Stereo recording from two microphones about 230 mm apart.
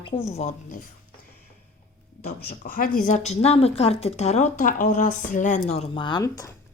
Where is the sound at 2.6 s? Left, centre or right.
Left; by 6.5 s centre.